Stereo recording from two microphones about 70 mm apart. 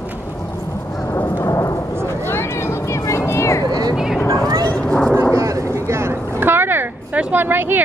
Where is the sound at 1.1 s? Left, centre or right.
Left.